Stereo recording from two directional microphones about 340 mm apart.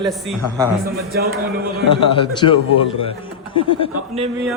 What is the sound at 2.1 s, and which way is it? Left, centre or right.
Speech, centre.